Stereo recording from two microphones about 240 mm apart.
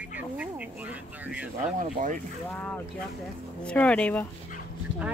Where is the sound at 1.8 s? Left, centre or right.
Right.